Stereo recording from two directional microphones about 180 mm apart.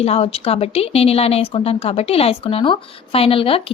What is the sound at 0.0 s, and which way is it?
Speech, 35° left (ahead or behind).